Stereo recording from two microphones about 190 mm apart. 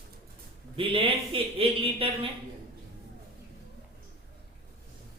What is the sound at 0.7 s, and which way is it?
Speech, 30° right (ahead or behind).